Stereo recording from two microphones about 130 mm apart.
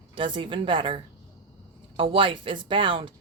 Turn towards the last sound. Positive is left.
turn(degrees=-40)  # may be behind; listen again after turning